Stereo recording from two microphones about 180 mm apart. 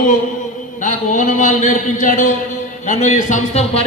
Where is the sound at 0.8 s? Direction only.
45° left (ahead or behind).